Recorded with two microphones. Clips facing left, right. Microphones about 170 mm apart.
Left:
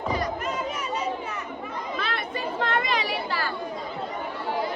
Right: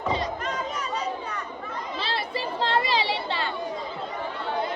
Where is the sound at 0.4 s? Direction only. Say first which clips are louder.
Left 1 dB; 5° left (ahead or behind).